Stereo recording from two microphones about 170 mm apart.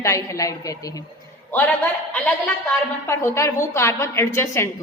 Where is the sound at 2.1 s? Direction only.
10° left (ahead or behind).